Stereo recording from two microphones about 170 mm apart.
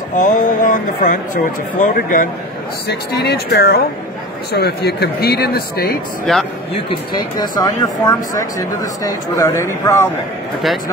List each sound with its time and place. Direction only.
0.1 s speech: 50° left (ahead or behind)
2.9 s speech: 70° left (ahead or behind)
6.3 s speech: centre (ahead or behind)
6.9 s speech: 25° left (ahead or behind)